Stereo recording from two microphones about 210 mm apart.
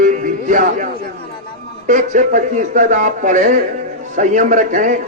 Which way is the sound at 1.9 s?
35° right (ahead or behind).